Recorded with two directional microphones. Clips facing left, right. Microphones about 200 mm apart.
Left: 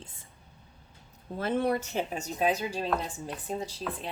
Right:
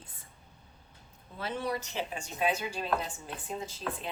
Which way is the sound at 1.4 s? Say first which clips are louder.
Left 7 dB; 55° left (ahead or behind).